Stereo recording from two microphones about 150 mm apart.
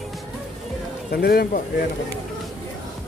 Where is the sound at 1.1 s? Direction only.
90° left.